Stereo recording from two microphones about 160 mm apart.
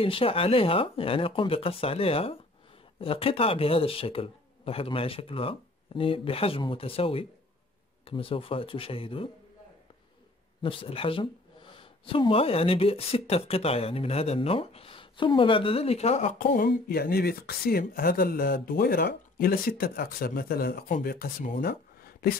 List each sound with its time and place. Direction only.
0.0 s speech: 35° left (ahead or behind)
10.6 s speech: 35° left (ahead or behind); by 22.3 s 70° left (ahead or behind)